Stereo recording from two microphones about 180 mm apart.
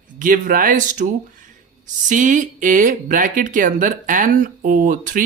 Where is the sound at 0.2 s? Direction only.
50° right (ahead or behind).